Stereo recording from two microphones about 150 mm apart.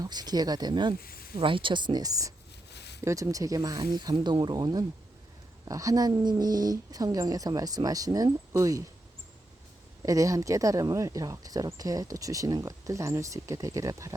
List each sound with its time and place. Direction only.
0.0 s speech: 25° right (ahead or behind)
2.7 s a sound: 90° left
3.0 s speech: 20° right (ahead or behind)
10.0 s speech: 20° right (ahead or behind)